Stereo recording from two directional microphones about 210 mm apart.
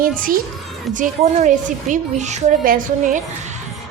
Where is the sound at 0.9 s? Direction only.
35° right (ahead or behind).